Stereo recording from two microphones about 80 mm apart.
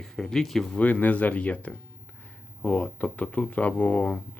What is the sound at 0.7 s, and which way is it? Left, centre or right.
Speech, centre.